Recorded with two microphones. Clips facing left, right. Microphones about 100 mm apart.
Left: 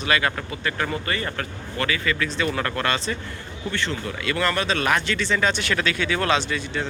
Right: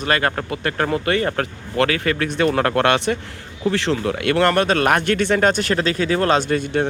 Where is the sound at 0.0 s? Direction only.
50° right (ahead or behind); by 3.2 s 70° right (ahead or behind).